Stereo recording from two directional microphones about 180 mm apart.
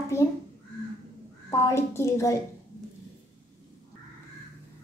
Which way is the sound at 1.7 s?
15° left (ahead or behind).